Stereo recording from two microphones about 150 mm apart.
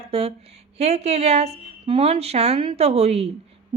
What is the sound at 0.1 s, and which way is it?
A woman's voice, 40° right (ahead or behind).